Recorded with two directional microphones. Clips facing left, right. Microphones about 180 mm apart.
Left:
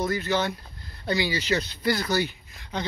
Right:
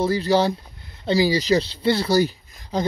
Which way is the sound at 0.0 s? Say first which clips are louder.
Right 7 dB; 30° right (ahead or behind).